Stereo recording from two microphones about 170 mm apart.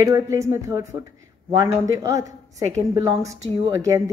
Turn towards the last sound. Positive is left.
turn(degrees=-15)  # may be behind; listen again after turning